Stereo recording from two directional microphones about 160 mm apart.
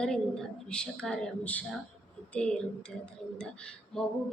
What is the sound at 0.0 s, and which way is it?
A woman's voice, 5° left (ahead or behind).